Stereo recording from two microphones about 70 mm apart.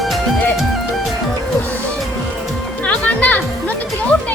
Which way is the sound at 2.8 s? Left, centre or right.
Left.